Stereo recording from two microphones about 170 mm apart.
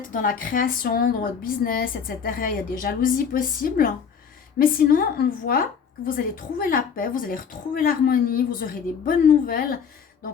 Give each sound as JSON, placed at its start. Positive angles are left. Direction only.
{"t": 0.0, "sound": "a woman's voice", "side_deg": 50}